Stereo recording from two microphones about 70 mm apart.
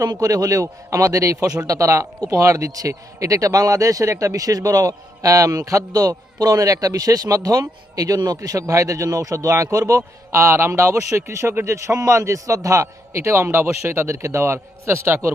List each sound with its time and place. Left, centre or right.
0.0 s a man's voice: right